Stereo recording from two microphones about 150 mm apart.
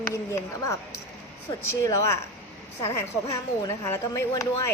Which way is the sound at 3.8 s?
15° left (ahead or behind).